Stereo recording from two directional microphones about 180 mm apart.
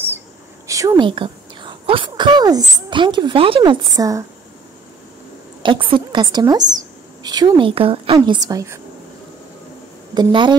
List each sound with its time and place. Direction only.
0.7 s a woman's voice: 20° right (ahead or behind)
5.6 s a woman's voice: 30° right (ahead or behind)
10.1 s a woman's voice: 25° right (ahead or behind)